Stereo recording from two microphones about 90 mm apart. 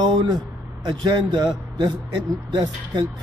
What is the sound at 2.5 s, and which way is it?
Speech, 55° right (ahead or behind).